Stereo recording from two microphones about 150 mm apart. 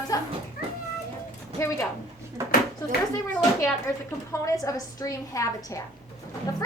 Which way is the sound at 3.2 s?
20° left (ahead or behind).